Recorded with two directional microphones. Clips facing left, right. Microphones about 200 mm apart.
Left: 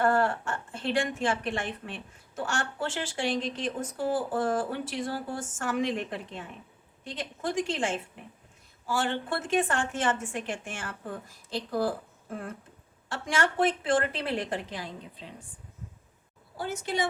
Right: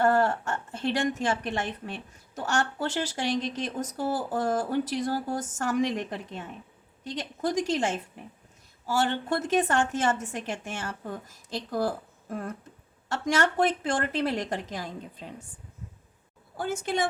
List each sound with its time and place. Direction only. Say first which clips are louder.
0.0 s a woman's voice: right 2 dB; 40° right (ahead or behind)
16.6 s a woman's voice: right 2 dB; 50° right (ahead or behind)